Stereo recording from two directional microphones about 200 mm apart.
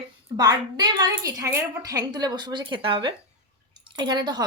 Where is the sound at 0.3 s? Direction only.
20° right (ahead or behind).